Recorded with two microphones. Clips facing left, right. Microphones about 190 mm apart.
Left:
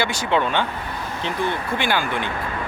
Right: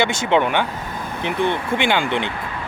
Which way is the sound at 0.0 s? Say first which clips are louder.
Right 3 dB; 25° right (ahead or behind).